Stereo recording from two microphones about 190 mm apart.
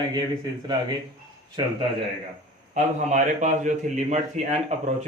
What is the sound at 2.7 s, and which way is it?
A man's voice, 40° right (ahead or behind).